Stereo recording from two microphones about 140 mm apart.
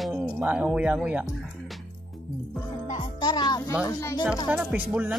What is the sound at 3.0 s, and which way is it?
Speech, 30° left (ahead or behind).